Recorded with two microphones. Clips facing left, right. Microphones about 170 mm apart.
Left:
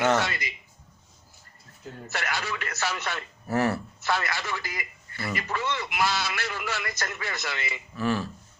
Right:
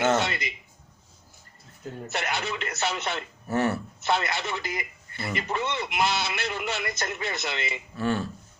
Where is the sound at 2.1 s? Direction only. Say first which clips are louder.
Right 1 dB; 20° right (ahead or behind).